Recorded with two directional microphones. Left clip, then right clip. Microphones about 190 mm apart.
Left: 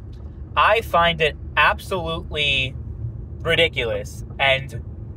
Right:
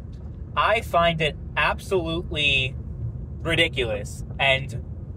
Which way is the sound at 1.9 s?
20° left (ahead or behind).